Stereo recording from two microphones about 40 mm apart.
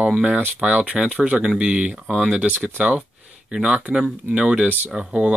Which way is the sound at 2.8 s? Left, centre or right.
Right.